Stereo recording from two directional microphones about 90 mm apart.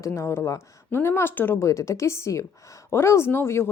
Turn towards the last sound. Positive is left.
turn(degrees=25)  # may be behind; listen again after turning